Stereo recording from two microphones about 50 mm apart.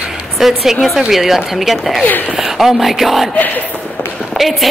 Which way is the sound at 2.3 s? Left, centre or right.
Centre.